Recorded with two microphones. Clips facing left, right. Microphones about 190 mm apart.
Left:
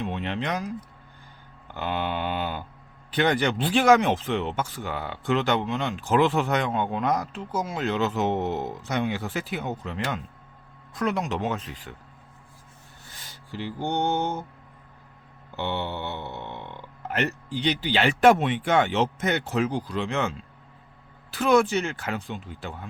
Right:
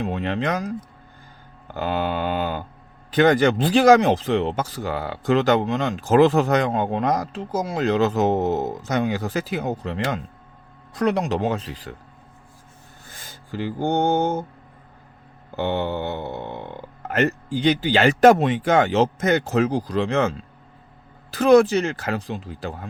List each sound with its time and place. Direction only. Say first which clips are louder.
0.0 s speech: right 5 dB; 40° right (ahead or behind)
13.1 s rub: right 5 dB; 50° right (ahead or behind)
15.5 s speech: right 6 dB; 45° right (ahead or behind)
21.3 s speech: right 6 dB; 40° right (ahead or behind)